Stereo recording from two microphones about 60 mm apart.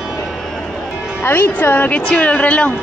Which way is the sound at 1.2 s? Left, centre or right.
Left.